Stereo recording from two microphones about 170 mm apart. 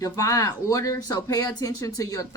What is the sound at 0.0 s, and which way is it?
Speech, 20° left (ahead or behind).